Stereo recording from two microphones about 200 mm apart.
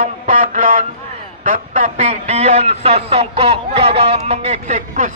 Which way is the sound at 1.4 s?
40° right (ahead or behind).